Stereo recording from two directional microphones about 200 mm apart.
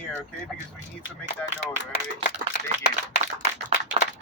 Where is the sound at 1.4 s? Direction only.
5° left (ahead or behind).